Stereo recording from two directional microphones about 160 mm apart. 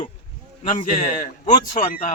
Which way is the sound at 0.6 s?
50° left (ahead or behind).